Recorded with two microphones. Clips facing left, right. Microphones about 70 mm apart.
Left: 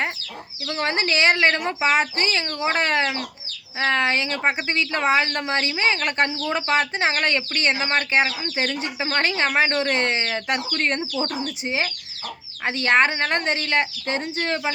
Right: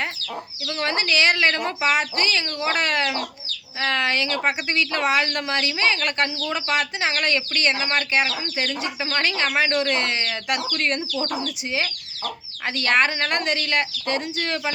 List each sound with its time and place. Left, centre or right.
0.7 s speech: left